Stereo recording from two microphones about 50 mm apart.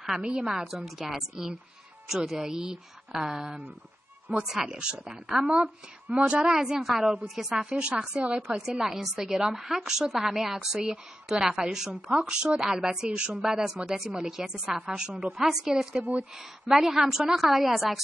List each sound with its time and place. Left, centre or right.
0.2 s a woman's voice: centre
0.5 s a woman's voice: centre
4.3 s speech: right
4.6 s a woman's voice: centre
6.5 s a woman's voice: centre
8.2 s a woman's voice: right
8.6 s a woman's voice: centre
16.0 s a woman's voice: right
16.7 s a woman's voice: centre